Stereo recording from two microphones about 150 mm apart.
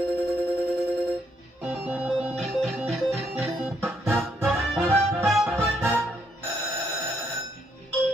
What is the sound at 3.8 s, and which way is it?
Music, 10° right (ahead or behind).